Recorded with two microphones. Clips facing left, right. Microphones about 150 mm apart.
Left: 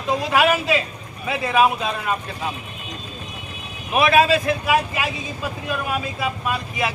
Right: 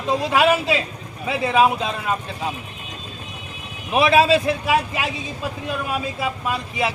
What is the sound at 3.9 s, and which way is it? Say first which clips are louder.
Speech: right 1 dB; 30° right (ahead or behind).